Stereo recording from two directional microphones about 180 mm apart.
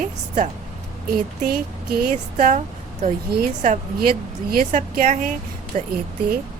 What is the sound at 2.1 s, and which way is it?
Speech, 45° right (ahead or behind).